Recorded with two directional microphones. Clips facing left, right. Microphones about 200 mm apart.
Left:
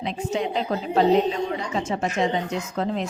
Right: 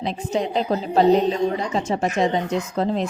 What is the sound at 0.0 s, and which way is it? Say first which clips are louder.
A woman's voice: right 2 dB; 35° right (ahead or behind).